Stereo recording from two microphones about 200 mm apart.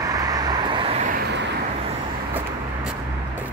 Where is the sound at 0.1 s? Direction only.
20° right (ahead or behind).